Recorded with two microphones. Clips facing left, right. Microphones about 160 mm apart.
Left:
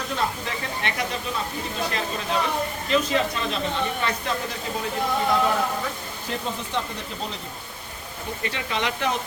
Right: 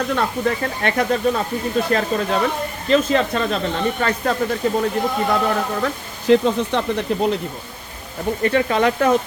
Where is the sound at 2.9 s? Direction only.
45° right (ahead or behind).